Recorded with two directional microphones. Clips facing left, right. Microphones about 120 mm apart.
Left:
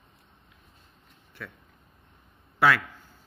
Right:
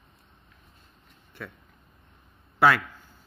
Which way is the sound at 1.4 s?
30° right (ahead or behind).